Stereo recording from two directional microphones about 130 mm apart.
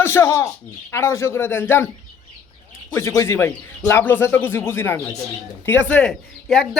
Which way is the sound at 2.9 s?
20° left (ahead or behind).